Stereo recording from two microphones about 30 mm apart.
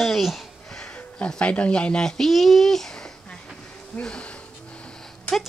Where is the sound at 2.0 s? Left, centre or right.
Centre.